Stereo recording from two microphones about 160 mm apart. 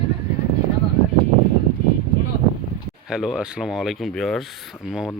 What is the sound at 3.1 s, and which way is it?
Speech, 5° right (ahead or behind).